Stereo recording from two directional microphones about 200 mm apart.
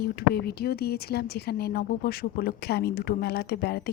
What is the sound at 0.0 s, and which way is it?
A woman's voice, 50° left (ahead or behind).